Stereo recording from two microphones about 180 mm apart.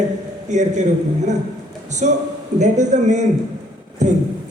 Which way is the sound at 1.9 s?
40° right (ahead or behind).